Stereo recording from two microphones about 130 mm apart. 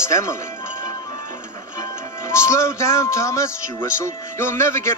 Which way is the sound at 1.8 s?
20° left (ahead or behind).